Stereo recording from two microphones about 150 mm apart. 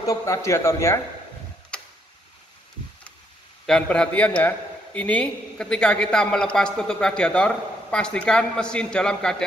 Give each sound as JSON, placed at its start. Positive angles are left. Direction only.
{"t": 0.0, "sound": "a man's voice", "side_deg": 20}
{"t": 3.6, "sound": "a man's voice", "side_deg": 5}